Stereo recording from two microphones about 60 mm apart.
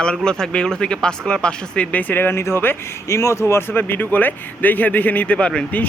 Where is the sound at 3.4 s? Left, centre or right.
Left.